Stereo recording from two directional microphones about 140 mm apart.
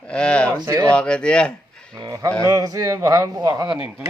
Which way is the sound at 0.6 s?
20° right (ahead or behind).